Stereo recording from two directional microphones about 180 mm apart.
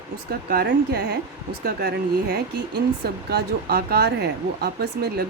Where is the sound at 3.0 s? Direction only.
60° right (ahead or behind).